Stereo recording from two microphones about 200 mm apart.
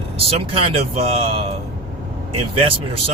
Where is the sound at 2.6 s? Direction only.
30° right (ahead or behind).